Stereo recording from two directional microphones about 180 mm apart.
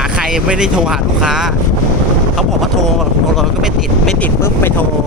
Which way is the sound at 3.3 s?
Centre (ahead or behind).